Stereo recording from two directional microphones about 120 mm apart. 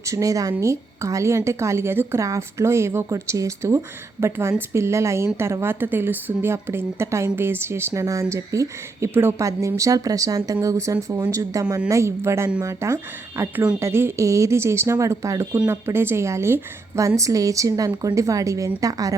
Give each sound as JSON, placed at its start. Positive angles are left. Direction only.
{"t": 0.0, "sound": "a woman's voice", "side_deg": -25}